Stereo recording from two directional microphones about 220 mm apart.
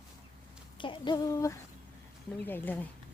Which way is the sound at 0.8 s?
20° left (ahead or behind).